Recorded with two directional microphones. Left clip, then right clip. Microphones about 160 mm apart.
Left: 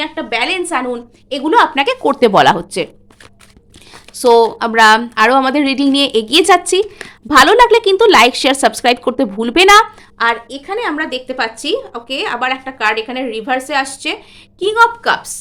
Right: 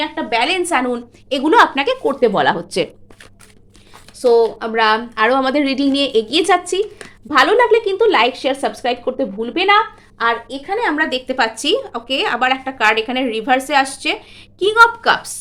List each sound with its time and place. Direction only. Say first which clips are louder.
0.0 s a woman's voice: even; 5° left (ahead or behind)
1.7 s speech: left 3 dB; 10° left (ahead or behind)
2.0 s speech: left 6 dB; 35° left (ahead or behind)
2.4 s speech: left 6 dB; 25° left (ahead or behind)
4.1 s a woman's voice: left 4 dB; 40° left (ahead or behind)
10.2 s speech: left 3 dB; 20° left (ahead or behind)
10.7 s a woman's voice: right 1 dB; centre (ahead or behind)